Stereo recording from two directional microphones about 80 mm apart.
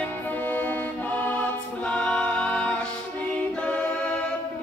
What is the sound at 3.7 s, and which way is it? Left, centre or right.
A capella, centre.